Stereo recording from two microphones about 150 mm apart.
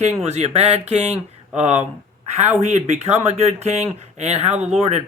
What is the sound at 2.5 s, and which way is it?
Speech, 50° right (ahead or behind).